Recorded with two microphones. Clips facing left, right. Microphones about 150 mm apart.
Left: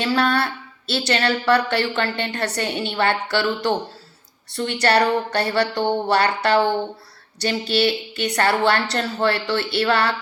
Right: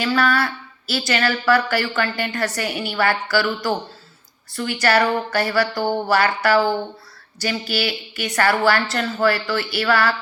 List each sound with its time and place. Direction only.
0.0 s speech: 30° left (ahead or behind)